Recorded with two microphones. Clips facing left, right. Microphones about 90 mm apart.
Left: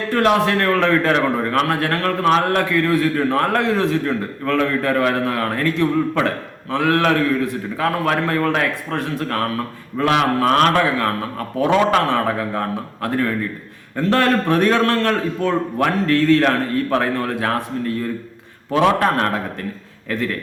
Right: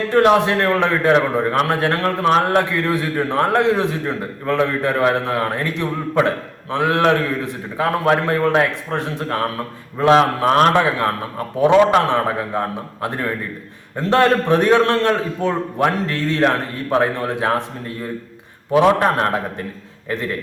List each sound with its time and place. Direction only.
0.1 s a man's voice: 20° right (ahead or behind)
18.9 s a man's voice: 25° right (ahead or behind)